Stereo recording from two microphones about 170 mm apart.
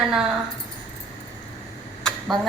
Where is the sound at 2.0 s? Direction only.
5° left (ahead or behind).